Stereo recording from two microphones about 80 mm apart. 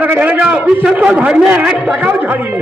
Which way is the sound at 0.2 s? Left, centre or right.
Centre.